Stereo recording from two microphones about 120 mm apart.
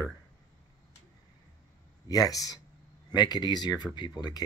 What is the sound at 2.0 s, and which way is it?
Speech, 30° left (ahead or behind).